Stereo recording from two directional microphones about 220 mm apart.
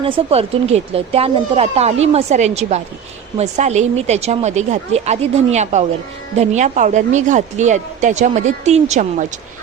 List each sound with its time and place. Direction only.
0.0 s speech: 25° right (ahead or behind)